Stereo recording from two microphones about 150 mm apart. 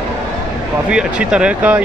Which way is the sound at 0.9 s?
5° right (ahead or behind).